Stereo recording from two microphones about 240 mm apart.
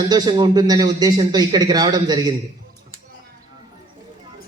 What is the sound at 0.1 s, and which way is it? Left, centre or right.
A man's voice, centre.